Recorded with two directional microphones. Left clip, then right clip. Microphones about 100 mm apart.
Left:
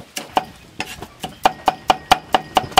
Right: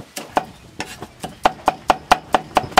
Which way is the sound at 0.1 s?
Centre (ahead or behind).